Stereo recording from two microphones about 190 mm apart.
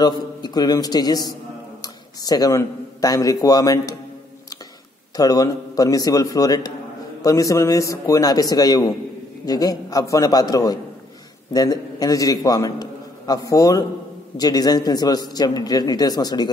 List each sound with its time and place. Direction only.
0.0 s a man's voice: 20° left (ahead or behind)
5.1 s a man's voice: 20° left (ahead or behind)